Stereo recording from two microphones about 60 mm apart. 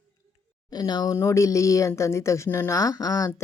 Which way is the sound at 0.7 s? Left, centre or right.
Left.